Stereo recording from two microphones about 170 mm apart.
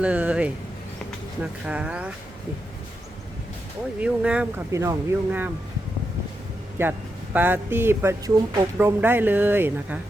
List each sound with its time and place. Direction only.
0.0 s speech: 5° right (ahead or behind)
4.0 s speech: 5° right (ahead or behind)
4.7 s speech: 15° right (ahead or behind)
6.8 s speech: 15° right (ahead or behind)